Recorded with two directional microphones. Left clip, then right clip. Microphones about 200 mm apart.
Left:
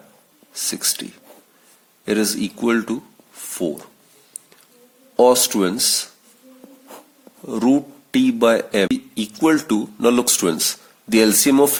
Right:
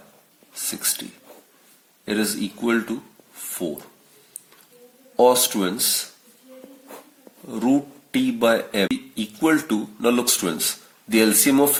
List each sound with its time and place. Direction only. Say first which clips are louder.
0.6 s speech: left 5 dB; 50° left (ahead or behind)
2.0 s speech: left 4 dB; 50° left (ahead or behind)
5.1 s speech: left 3 dB; 50° left (ahead or behind)
7.4 s speech: left 3 dB; 50° left (ahead or behind)